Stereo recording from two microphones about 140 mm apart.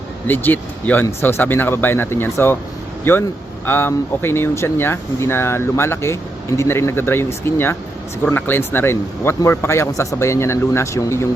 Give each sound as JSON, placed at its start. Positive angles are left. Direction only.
{"t": 0.3, "sound": "speech", "side_deg": 15}